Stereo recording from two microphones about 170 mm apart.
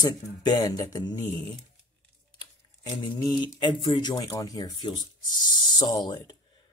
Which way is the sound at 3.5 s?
25° left (ahead or behind).